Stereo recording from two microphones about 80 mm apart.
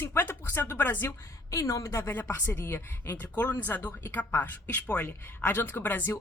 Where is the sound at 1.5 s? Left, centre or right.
Left.